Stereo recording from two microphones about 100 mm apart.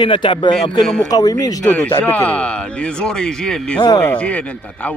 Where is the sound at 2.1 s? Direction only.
15° left (ahead or behind).